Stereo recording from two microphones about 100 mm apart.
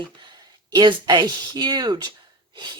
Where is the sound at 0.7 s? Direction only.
45° right (ahead or behind).